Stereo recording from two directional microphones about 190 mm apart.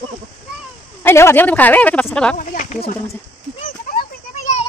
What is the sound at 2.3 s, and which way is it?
Speech, 40° left (ahead or behind).